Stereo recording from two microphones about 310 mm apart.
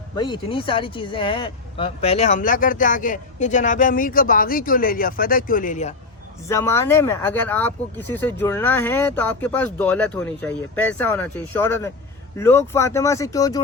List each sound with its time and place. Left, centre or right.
0.2 s speech: centre
6.5 s speech: centre